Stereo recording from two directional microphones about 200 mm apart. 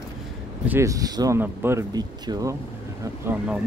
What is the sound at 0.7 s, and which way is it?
Speech, 15° right (ahead or behind).